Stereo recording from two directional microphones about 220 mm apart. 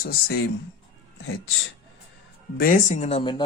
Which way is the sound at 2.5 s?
40° left (ahead or behind).